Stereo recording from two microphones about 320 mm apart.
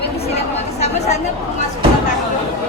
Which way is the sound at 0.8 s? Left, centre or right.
Left.